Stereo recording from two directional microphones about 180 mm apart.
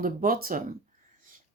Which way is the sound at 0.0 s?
50° right (ahead or behind).